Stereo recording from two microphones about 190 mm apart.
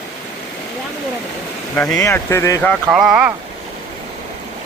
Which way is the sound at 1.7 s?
10° left (ahead or behind).